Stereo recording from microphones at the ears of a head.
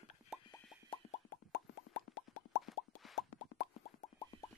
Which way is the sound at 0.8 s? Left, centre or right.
Left.